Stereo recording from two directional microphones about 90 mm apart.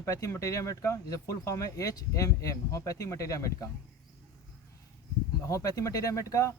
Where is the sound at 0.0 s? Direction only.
35° left (ahead or behind).